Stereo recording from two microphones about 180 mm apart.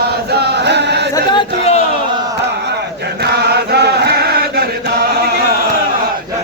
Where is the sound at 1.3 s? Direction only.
35° left (ahead or behind).